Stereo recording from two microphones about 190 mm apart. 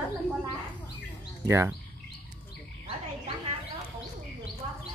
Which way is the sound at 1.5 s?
15° right (ahead or behind).